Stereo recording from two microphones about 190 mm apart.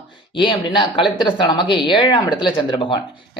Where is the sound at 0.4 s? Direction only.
25° left (ahead or behind).